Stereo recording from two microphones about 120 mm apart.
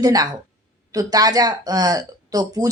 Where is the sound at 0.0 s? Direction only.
30° right (ahead or behind).